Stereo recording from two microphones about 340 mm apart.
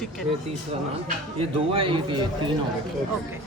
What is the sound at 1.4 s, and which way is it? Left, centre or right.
Speech, centre.